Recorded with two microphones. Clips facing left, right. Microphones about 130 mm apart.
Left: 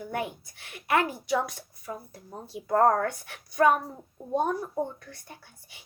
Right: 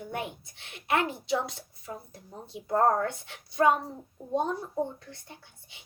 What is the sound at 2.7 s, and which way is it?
Speech, 50° left (ahead or behind).